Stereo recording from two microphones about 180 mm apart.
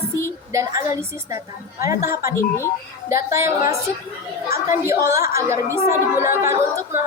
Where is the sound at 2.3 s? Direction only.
15° left (ahead or behind).